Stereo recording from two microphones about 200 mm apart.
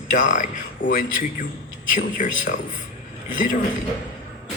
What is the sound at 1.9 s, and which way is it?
Speech, 40° left (ahead or behind).